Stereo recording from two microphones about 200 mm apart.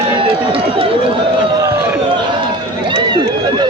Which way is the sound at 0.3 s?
25° right (ahead or behind).